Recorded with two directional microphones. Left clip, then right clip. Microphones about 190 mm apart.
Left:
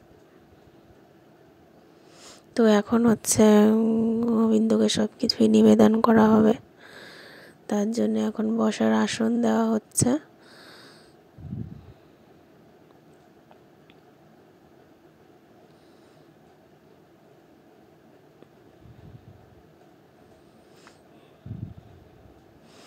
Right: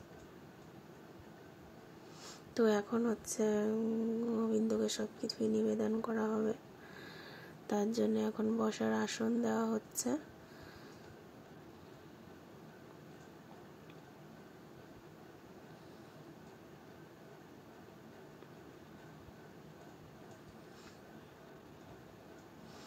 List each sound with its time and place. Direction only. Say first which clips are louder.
2.2 s speech: left 11 dB; 45° left (ahead or behind)